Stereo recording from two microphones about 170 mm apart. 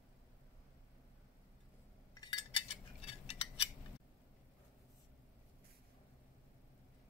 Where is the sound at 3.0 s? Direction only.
35° left (ahead or behind).